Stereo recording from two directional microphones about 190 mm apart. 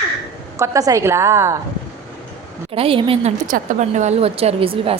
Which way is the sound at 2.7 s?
30° right (ahead or behind).